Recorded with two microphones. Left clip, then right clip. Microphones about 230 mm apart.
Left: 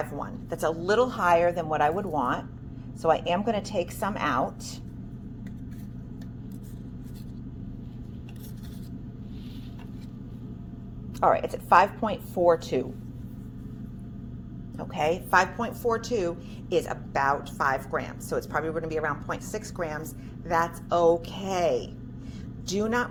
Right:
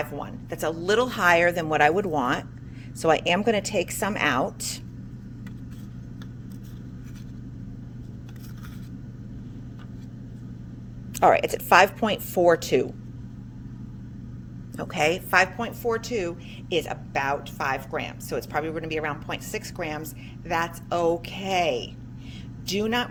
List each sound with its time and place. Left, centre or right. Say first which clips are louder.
0.0 s speech: right 1 dB; right
11.1 s speech: right 4 dB; right
14.8 s speech: right 3 dB; right
15.3 s a woman's voice: right 2 dB; right